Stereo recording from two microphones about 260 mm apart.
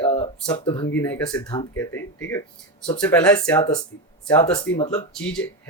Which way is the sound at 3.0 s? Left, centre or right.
Centre.